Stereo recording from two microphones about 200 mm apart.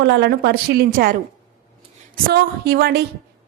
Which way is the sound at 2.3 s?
55° right (ahead or behind).